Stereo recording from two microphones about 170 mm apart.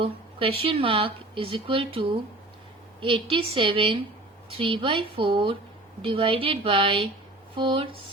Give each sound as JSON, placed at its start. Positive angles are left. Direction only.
{"t": 0.0, "sound": "speech", "side_deg": -35}